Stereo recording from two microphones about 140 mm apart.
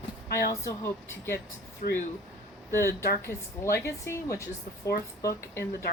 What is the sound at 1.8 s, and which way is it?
Speech, 90° left.